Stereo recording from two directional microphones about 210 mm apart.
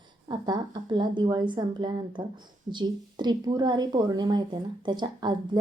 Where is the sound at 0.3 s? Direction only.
20° right (ahead or behind).